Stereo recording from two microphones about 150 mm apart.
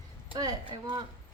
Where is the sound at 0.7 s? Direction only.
30° right (ahead or behind).